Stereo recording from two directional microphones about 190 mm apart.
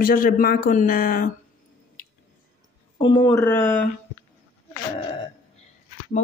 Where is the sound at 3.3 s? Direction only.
10° left (ahead or behind).